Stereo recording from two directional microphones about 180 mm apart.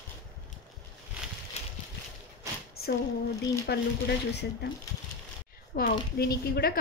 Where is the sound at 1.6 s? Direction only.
35° left (ahead or behind).